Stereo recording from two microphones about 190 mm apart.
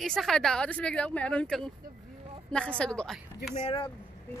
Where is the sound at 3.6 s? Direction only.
25° left (ahead or behind).